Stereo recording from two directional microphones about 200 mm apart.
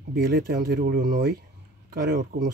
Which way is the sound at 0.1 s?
50° right (ahead or behind).